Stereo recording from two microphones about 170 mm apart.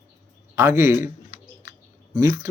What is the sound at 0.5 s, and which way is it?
Speech, 15° right (ahead or behind).